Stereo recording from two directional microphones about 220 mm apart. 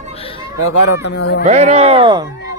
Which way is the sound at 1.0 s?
50° left (ahead or behind).